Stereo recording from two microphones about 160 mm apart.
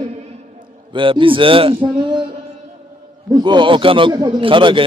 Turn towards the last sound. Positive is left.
turn(degrees=-30)  # may be behind; listen again after turning